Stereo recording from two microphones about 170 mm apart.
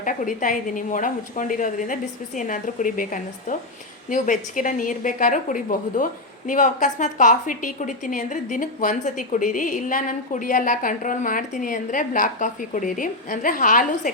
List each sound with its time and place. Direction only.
0.0 s a woman's voice: 50° left (ahead or behind)